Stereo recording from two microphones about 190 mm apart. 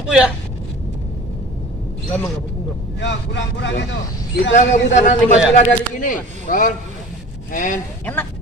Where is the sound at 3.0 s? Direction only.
70° left (ahead or behind).